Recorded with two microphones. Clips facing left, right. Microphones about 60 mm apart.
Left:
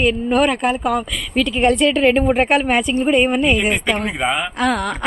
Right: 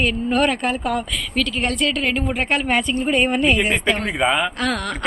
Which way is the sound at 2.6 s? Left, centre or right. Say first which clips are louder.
Left 3 dB; centre.